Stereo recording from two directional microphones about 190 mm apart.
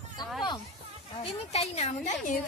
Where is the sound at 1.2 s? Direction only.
35° left (ahead or behind).